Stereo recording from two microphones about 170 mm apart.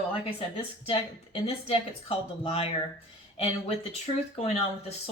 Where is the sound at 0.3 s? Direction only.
35° left (ahead or behind).